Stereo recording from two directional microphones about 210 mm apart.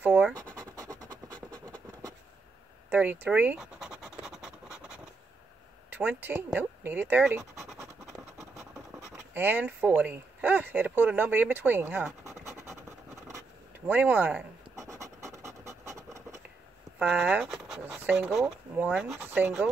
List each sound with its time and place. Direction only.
0.0 s speech: 10° right (ahead or behind)
0.7 s scratch: 20° right (ahead or behind)
2.9 s scratch: 10° right (ahead or behind)
5.9 s speech: 10° right (ahead or behind)
13.8 s pant: 10° right (ahead or behind)
17.0 s speech: 5° right (ahead or behind)